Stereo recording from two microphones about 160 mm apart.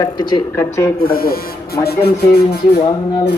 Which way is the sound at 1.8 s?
80° left.